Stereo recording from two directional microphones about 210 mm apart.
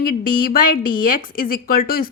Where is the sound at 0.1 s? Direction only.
45° left (ahead or behind).